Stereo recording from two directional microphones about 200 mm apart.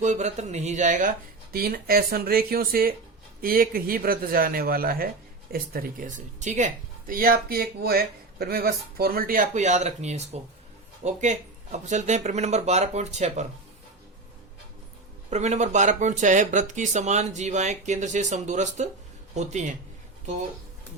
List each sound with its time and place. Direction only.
0.0 s speech: 35° right (ahead or behind)
1.5 s speech: 50° right (ahead or behind)
15.3 s speech: 35° right (ahead or behind)